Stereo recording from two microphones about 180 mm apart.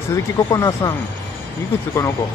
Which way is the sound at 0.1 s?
20° left (ahead or behind).